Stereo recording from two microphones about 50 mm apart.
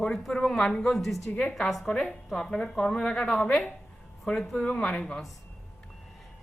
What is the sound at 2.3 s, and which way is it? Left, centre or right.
A woman's voice, centre.